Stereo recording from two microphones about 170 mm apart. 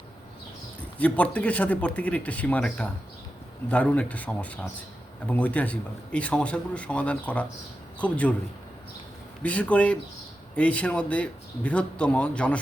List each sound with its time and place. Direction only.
0.9 s a man's voice: 10° left (ahead or behind)
9.4 s a man's voice: 10° left (ahead or behind)